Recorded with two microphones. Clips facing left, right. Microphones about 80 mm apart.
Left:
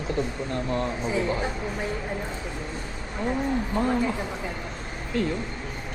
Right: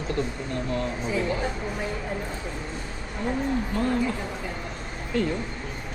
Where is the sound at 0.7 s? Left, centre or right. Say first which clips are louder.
Left 1 dB; left.